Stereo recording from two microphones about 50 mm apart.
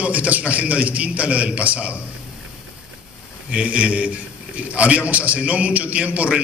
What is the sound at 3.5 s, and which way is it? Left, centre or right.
A man's voice, right.